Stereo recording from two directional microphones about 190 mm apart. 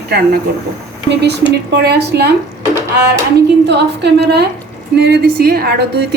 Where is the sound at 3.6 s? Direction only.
65° right (ahead or behind).